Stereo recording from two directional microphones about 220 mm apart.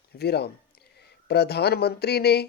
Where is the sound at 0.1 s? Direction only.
50° left (ahead or behind).